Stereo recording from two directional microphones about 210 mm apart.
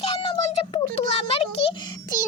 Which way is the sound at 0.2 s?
25° left (ahead or behind).